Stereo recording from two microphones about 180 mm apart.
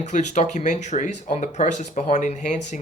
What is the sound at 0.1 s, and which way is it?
Speech, 40° left (ahead or behind).